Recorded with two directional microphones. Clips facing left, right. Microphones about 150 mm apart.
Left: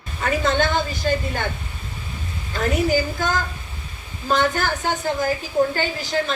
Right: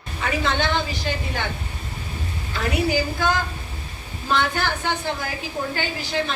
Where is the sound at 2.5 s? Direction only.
45° left (ahead or behind).